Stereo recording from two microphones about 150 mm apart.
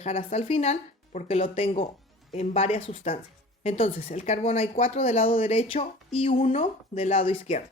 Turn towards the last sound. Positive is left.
turn(degrees=40)  # may be behind; listen again after turning